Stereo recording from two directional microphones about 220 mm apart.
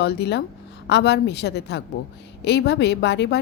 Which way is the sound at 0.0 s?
50° left (ahead or behind).